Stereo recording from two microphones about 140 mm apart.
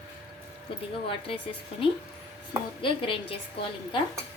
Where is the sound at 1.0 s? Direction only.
40° left (ahead or behind).